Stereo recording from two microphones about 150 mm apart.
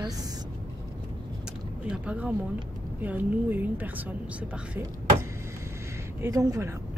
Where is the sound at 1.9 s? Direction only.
10° right (ahead or behind).